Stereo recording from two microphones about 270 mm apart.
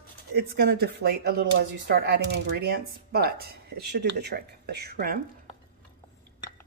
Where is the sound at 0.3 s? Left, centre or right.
Right.